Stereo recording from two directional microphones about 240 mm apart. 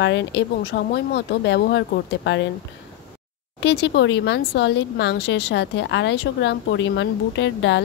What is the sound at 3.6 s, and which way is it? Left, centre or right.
Speech, left.